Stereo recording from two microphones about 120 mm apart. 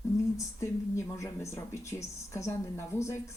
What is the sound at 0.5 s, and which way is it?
Speech, 25° left (ahead or behind).